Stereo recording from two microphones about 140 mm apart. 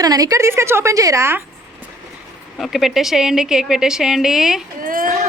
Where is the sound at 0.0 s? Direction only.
25° right (ahead or behind).